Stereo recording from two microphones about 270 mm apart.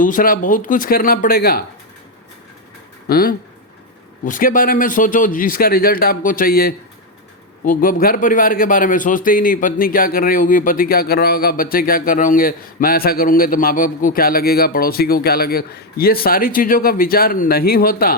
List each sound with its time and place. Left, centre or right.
0.0 s a man's voice: left
3.1 s a man's voice: left